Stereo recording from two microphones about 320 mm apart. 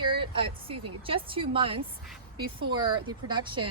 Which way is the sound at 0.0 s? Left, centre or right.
Centre.